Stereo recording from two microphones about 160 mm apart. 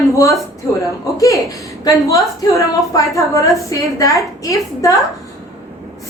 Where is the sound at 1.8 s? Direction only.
20° left (ahead or behind).